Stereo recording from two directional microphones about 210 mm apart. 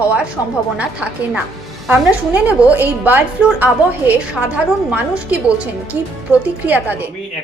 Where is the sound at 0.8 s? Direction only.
5° right (ahead or behind).